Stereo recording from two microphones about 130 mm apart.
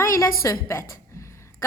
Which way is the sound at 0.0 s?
25° left (ahead or behind).